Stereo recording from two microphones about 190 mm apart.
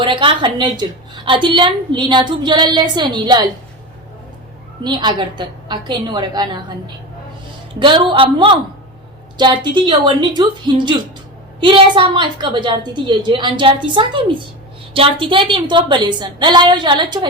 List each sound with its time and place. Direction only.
0.0 s a woman's voice: 25° right (ahead or behind)
4.8 s a woman's voice: 25° right (ahead or behind)
7.8 s a woman's voice: 25° right (ahead or behind)